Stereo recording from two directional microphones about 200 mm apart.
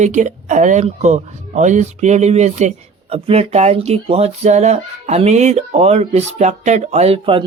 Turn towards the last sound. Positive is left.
turn(degrees=-30)  # may be behind; listen again after turning